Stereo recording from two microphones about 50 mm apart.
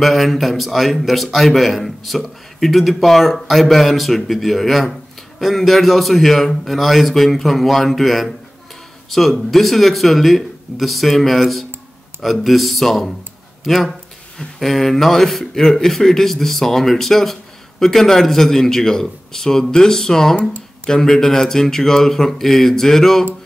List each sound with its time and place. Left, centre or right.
0.0 s a man's voice: centre